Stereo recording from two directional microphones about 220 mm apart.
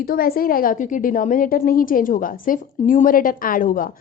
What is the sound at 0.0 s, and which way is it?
A woman's voice, 45° left (ahead or behind).